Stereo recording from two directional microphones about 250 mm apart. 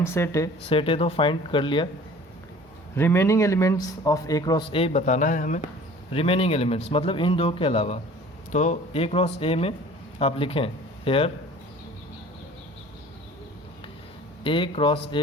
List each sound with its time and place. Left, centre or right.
0.0 s a man's voice: centre
2.9 s a man's voice: centre
14.4 s a man's voice: centre